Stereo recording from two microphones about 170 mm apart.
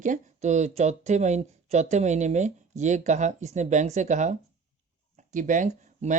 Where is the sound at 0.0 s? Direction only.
45° right (ahead or behind).